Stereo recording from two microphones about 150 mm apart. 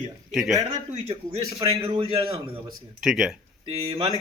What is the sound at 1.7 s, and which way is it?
Speech, 30° right (ahead or behind).